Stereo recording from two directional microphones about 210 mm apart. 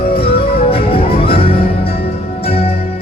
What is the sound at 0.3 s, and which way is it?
Music, 25° left (ahead or behind).